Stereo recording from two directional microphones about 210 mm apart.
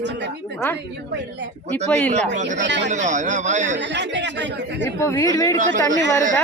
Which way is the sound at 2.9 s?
35° right (ahead or behind).